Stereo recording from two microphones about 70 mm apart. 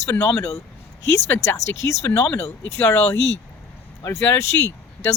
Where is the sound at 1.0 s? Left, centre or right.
Left.